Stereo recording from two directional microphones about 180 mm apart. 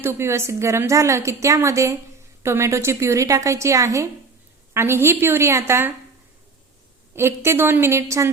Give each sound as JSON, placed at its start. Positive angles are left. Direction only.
{"t": 0.0, "sound": "a woman's voice", "side_deg": -15}
{"t": 7.2, "sound": "a woman's voice", "side_deg": -15}